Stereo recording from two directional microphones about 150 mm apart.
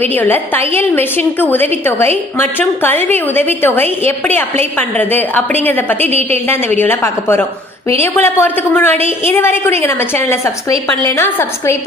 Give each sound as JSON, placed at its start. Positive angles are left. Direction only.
{"t": 0.1, "sound": "a woman's voice", "side_deg": 15}
{"t": 6.0, "sound": "a woman's voice", "side_deg": -45}
{"t": 6.8, "sound": "a woman's voice", "side_deg": 15}